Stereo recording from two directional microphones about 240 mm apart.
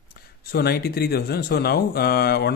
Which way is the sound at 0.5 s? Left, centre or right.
Left.